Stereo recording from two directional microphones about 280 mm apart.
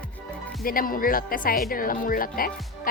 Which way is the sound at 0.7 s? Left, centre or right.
Left.